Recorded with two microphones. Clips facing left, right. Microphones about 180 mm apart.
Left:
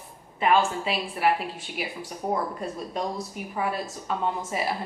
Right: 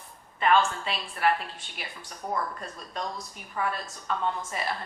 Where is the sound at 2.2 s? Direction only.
25° left (ahead or behind).